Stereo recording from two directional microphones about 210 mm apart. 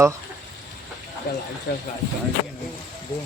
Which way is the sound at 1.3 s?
45° left (ahead or behind).